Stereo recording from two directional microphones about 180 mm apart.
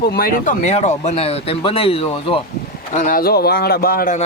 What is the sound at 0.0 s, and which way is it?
Speech, 60° left (ahead or behind).